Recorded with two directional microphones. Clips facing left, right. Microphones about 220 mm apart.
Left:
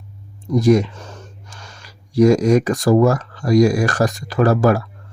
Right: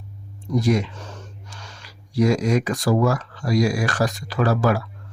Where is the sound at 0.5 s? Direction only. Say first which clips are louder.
Left 6 dB; 45° left (ahead or behind).